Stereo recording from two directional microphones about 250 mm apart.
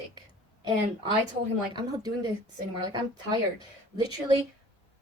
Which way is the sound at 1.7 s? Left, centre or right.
Centre.